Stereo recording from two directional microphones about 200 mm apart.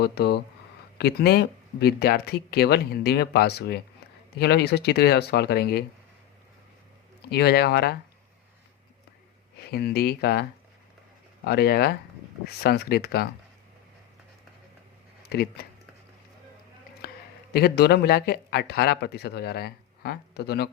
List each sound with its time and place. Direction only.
0.0 s speech: 55° left (ahead or behind)
7.3 s speech: 55° left (ahead or behind)
9.7 s speech: 50° left (ahead or behind)
11.4 s speech: 55° left (ahead or behind)
15.2 s speech: 55° left (ahead or behind)
17.0 s a sound: 50° left (ahead or behind)
17.5 s speech: 55° left (ahead or behind)